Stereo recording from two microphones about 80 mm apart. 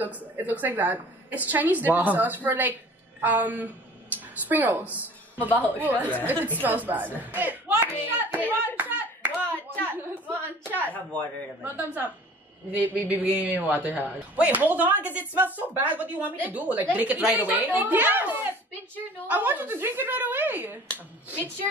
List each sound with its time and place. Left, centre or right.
0.0 s a woman's voice: right
8.4 s hands: left
8.7 s hands: centre
9.8 s a sound: right
10.9 s speech: centre
11.6 s speech: right